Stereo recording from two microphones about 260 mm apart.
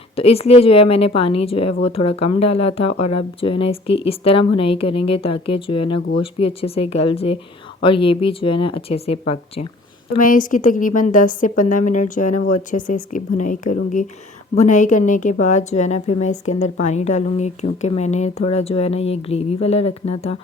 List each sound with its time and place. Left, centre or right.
0.2 s a woman's voice: left